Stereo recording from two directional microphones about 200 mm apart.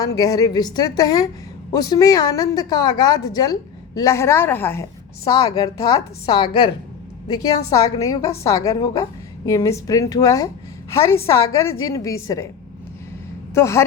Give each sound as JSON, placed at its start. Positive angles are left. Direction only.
{"t": 0.0, "sound": "a woman's voice", "side_deg": 20}
{"t": 13.5, "sound": "a woman's voice", "side_deg": 15}